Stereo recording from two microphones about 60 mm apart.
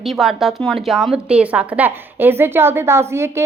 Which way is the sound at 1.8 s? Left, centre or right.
Right.